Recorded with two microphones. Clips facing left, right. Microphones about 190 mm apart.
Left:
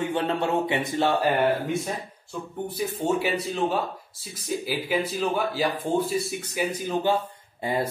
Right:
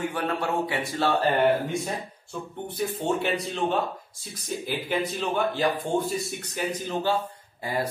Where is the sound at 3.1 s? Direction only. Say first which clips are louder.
Left 2 dB; 5° left (ahead or behind).